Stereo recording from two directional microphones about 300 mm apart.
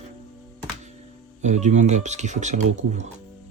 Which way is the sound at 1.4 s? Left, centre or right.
Right.